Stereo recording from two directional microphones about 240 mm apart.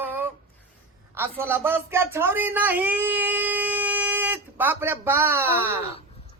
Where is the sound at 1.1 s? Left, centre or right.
Centre.